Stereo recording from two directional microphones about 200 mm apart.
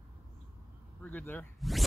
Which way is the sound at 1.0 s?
10° left (ahead or behind).